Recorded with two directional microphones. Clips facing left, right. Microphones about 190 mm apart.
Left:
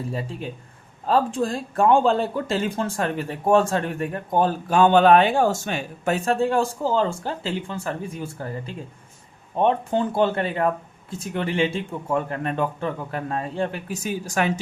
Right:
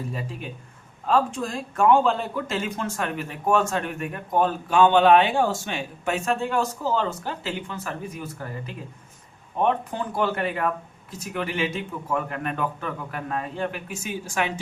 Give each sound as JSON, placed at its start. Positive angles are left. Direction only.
{"t": 0.1, "sound": "speech", "side_deg": 30}